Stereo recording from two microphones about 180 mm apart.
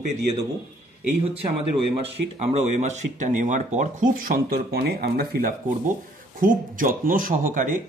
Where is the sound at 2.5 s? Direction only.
40° right (ahead or behind).